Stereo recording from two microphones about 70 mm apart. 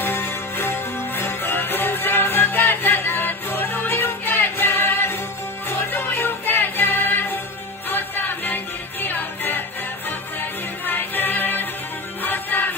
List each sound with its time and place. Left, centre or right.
0.0 s music: left
10.9 s music: left